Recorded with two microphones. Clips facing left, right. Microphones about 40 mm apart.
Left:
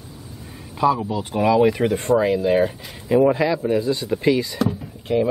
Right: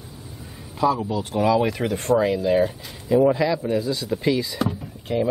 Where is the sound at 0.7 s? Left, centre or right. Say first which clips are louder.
Left 2 dB; centre.